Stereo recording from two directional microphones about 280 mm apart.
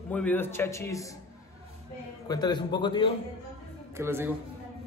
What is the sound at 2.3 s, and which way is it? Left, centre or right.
Speech, centre.